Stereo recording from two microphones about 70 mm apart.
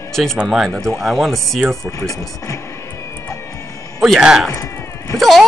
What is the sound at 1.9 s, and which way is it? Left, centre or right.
Speech, left.